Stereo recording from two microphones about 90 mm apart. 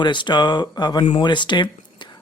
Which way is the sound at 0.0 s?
60° left (ahead or behind).